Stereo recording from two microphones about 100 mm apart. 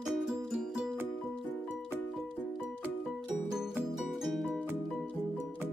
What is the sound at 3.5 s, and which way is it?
Music, 5° right (ahead or behind).